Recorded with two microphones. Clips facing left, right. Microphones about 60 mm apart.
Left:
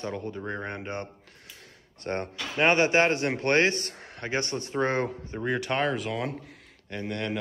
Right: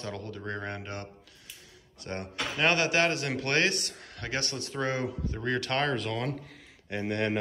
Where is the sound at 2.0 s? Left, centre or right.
Left.